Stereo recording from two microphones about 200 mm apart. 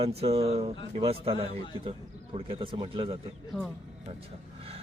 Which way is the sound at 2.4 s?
25° right (ahead or behind).